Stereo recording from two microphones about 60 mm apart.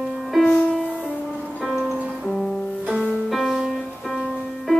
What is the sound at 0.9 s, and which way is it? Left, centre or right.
Music, centre.